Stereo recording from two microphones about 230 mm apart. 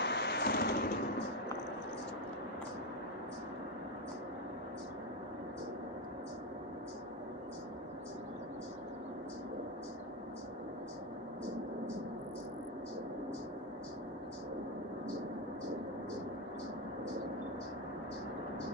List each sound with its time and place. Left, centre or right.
0.0 s vehicle: left